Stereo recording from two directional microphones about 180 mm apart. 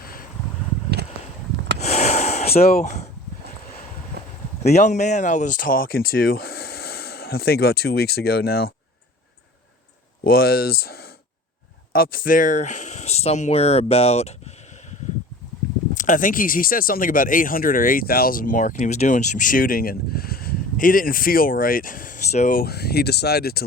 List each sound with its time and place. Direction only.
0.0 s a sound: 55° left (ahead or behind)
1.8 s a sound: 40° left (ahead or behind)
2.6 s speech: 55° left (ahead or behind)
4.6 s speech: 40° left (ahead or behind); by 8.7 s 60° left (ahead or behind)
10.2 s speech: 55° left (ahead or behind); by 14.3 s 35° left (ahead or behind)
16.0 s speech: 45° left (ahead or behind)